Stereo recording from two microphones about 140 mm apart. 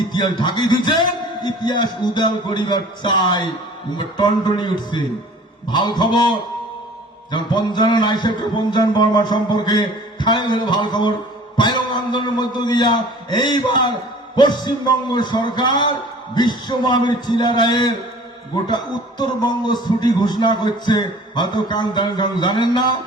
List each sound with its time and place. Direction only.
0.1 s a man's voice: 30° left (ahead or behind)
19.2 s a man's voice: 30° left (ahead or behind)